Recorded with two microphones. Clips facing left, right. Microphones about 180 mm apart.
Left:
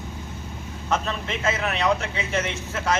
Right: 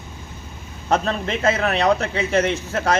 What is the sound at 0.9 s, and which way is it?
Speech, 35° right (ahead or behind).